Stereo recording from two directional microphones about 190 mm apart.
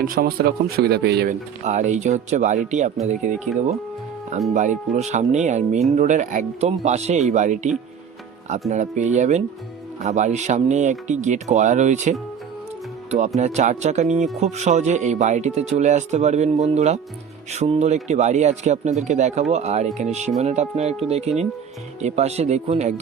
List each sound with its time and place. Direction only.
0.0 s speech: 50° right (ahead or behind)
1.6 s speech: 40° right (ahead or behind)
4.5 s speech: 40° right (ahead or behind)
8.7 s speech: 40° right (ahead or behind)